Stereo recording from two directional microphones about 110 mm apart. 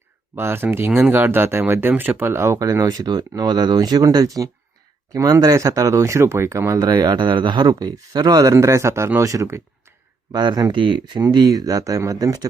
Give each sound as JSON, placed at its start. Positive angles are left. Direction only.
{"t": 0.3, "sound": "speech", "side_deg": -20}